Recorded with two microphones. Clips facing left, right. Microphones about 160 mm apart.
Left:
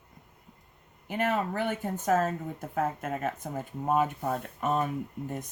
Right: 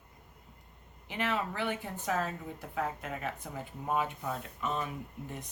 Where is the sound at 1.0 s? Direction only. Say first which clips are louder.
Left 5 dB; 50° left (ahead or behind).